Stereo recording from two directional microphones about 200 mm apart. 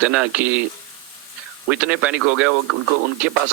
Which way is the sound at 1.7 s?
5° right (ahead or behind).